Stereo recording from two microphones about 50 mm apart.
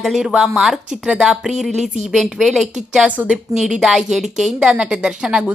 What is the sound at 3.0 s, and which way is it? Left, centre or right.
Speech, right.